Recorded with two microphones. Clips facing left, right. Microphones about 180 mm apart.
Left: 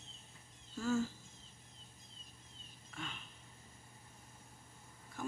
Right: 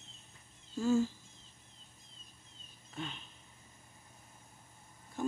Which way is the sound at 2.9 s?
25° right (ahead or behind).